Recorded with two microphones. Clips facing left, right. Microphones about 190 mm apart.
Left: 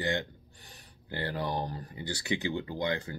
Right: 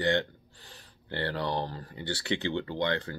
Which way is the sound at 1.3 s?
15° left (ahead or behind).